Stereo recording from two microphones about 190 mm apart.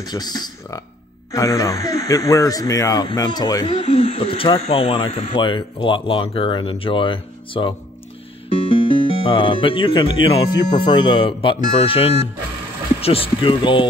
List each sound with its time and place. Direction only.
0.0 s speech: 20° left (ahead or behind)